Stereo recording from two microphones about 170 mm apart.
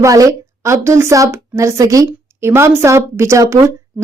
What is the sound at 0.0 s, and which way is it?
A woman's voice, 20° right (ahead or behind).